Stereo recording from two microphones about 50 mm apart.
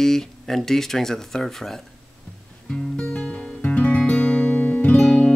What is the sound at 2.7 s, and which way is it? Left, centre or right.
Music, left.